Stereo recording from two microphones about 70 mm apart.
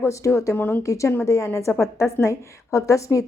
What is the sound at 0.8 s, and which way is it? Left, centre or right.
A woman's voice, left.